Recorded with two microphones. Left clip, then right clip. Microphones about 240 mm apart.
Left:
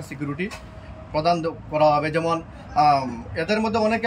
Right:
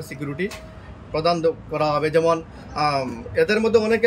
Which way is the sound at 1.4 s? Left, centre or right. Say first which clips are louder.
Left 1 dB; centre.